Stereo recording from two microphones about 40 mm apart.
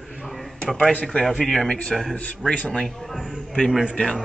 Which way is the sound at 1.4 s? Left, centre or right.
Centre.